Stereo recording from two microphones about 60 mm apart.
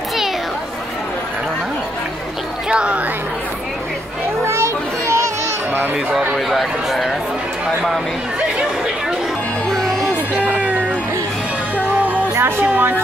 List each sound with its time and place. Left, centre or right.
2.7 s speech: centre
4.5 s music: right
6.1 s speech: centre
9.7 s music: centre
10.3 s music: right
12.4 s music: right